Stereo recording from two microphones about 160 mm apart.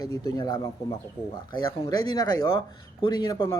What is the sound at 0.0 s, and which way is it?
Speech, 25° left (ahead or behind).